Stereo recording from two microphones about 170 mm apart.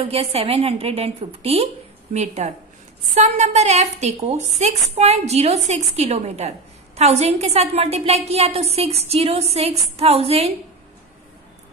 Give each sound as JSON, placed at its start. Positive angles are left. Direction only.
{"t": 0.0, "sound": "speech", "side_deg": -35}